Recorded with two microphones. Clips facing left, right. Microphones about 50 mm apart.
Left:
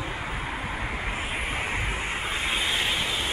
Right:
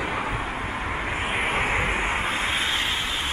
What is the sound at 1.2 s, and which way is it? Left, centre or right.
Vehicle, right.